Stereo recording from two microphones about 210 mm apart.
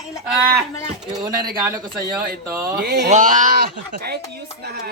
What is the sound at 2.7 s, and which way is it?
Speech, 50° right (ahead or behind).